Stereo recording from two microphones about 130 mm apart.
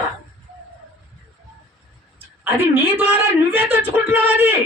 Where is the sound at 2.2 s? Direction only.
15° right (ahead or behind).